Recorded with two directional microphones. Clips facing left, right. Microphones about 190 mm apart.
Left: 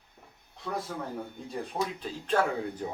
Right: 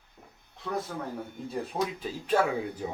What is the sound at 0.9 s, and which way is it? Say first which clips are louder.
Speech: even; 5° left (ahead or behind).